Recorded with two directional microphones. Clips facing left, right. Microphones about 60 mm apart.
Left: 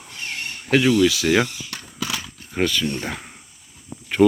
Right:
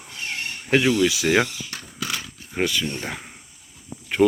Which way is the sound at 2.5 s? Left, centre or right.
Centre.